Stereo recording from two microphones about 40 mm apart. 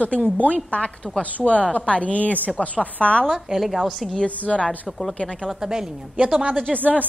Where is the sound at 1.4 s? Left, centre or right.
Left.